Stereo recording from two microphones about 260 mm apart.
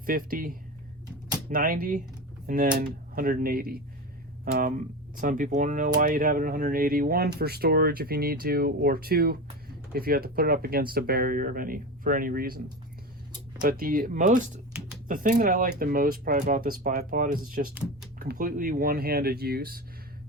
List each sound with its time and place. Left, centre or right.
0.0 s speech: right
5.1 s speech: right